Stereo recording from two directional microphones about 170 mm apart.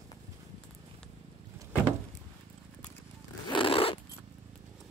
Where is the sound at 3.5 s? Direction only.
30° left (ahead or behind).